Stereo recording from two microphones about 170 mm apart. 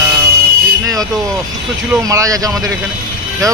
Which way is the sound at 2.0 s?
20° right (ahead or behind).